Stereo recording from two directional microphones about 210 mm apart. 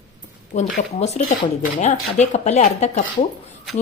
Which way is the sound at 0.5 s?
35° left (ahead or behind).